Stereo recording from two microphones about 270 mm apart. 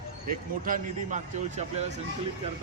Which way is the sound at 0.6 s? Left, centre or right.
Right.